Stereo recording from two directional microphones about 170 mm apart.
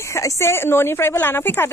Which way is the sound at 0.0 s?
20° left (ahead or behind).